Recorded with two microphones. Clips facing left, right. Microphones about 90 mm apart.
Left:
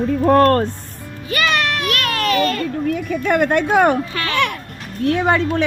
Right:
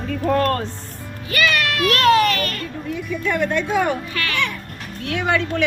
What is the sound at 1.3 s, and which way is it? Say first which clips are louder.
Music: left 1 dB; 25° left (ahead or behind).